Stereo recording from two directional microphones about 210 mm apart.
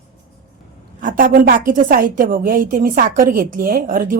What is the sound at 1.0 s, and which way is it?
A woman's voice, 40° right (ahead or behind).